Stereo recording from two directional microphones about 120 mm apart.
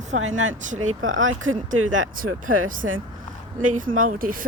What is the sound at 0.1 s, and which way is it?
Speech, 80° right.